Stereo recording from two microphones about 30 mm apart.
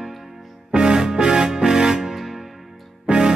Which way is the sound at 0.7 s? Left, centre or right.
Right.